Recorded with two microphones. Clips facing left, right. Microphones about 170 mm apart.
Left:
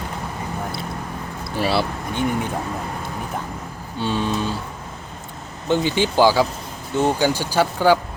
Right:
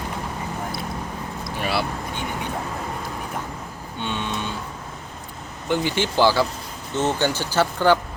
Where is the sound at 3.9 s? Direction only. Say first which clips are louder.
Left 6 dB; 35° left (ahead or behind).